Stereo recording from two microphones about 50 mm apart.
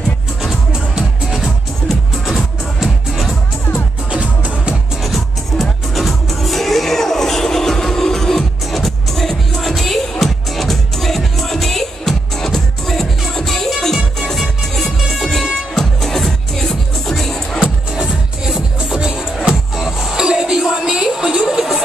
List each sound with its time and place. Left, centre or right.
0.4 s music: centre
4.1 s music: right
5.0 s music: centre
17.9 s music: centre